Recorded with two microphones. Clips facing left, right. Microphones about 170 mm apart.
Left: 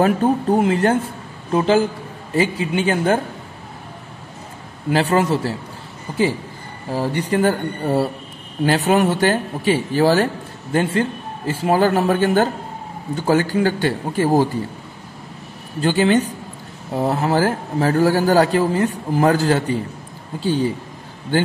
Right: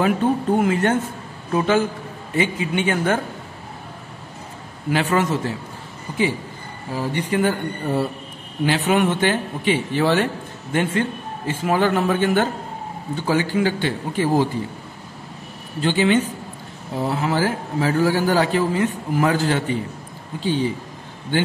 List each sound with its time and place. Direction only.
0.0 s speech: 35° left (ahead or behind)
4.9 s speech: 35° left (ahead or behind)
6.9 s a man's voice: 40° left (ahead or behind)
15.8 s a man's voice: 45° left (ahead or behind)